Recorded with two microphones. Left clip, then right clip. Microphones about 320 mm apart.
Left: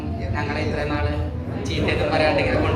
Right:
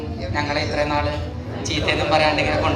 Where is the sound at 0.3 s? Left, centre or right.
Right.